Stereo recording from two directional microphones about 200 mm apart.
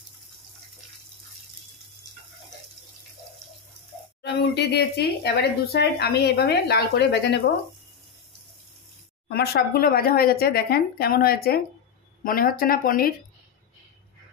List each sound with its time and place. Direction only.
4.2 s speech: 55° left (ahead or behind)
9.3 s speech: 50° left (ahead or behind)